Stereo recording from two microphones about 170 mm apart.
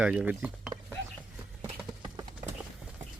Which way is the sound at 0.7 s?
20° right (ahead or behind).